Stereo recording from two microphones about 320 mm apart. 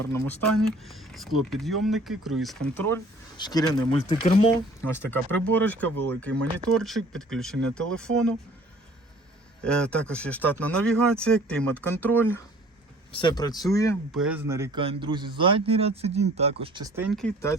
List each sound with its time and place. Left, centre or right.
0.0 s speech: centre
4.9 s speech: centre
9.6 s speech: centre
14.2 s speech: centre